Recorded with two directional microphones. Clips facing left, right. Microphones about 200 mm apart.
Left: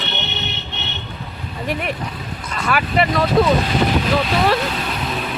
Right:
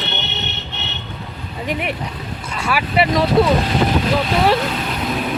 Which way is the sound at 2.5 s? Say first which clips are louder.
Even; 10° right (ahead or behind).